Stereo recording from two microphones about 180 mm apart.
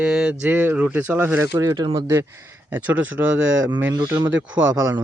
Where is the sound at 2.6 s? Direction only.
10° right (ahead or behind).